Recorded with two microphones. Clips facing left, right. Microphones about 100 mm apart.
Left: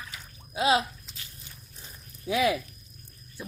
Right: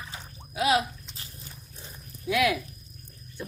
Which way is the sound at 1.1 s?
35° right (ahead or behind).